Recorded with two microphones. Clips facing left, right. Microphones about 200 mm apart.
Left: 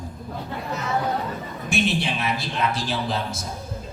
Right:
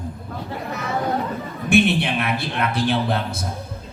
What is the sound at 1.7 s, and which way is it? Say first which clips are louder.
A man's voice: right 6 dB; 60° right (ahead or behind).